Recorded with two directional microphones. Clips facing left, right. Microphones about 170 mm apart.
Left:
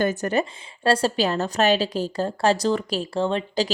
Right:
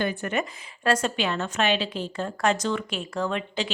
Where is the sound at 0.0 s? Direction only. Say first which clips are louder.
Left 5 dB; 40° left (ahead or behind).